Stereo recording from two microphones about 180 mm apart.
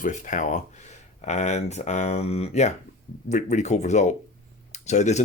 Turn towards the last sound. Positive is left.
turn(degrees=40)  # may be behind; listen again after turning